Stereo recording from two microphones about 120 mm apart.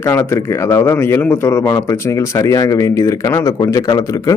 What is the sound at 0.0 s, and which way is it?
A man's voice, 25° left (ahead or behind).